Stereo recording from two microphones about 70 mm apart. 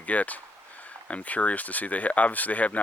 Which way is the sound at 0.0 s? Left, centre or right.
Left.